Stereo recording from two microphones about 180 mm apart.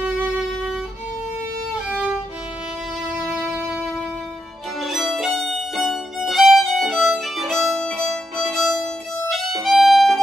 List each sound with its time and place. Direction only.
3.3 s music: 5° right (ahead or behind)
4.8 s violin: centre (ahead or behind)